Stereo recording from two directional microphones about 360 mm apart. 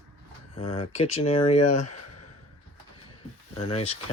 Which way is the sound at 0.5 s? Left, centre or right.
Centre.